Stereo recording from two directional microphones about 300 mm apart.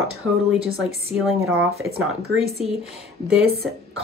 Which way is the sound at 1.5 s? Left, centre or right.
Right.